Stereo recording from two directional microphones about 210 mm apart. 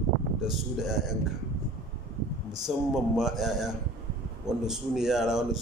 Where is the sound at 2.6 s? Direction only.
Centre (ahead or behind).